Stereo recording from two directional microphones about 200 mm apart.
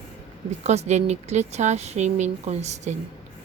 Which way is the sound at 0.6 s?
35° right (ahead or behind).